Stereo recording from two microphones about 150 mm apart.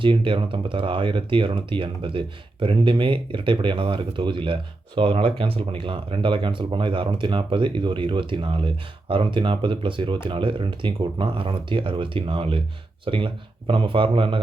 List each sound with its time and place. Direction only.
0.0 s speech: 35° right (ahead or behind)